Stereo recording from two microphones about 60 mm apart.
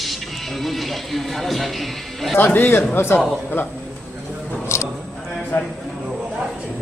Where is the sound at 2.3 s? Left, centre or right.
Left.